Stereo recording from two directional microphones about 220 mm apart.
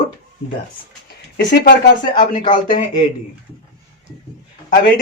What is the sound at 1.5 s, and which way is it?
Speech, 35° left (ahead or behind).